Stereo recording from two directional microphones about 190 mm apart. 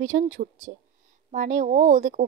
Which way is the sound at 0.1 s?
45° right (ahead or behind).